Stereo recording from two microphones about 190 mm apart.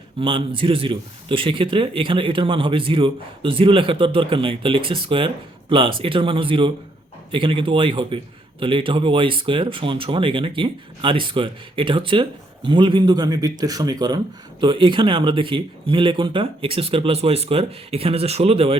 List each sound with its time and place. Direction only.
0.2 s a man's voice: 30° right (ahead or behind)